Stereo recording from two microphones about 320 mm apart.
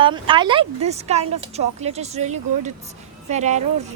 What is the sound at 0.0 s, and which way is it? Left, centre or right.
A woman's voice, centre.